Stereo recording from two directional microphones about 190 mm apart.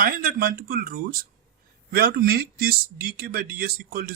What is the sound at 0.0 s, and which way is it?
Speech, 50° right (ahead or behind).